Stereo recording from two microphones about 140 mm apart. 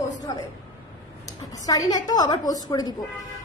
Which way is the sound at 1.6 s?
25° left (ahead or behind).